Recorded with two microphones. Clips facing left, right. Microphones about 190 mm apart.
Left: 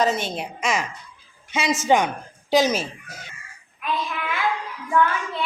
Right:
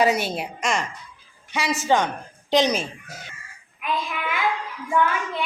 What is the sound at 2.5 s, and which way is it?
Speech, 5° left (ahead or behind).